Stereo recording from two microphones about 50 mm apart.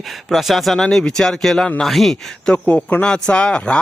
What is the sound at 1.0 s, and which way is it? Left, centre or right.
Speech, centre.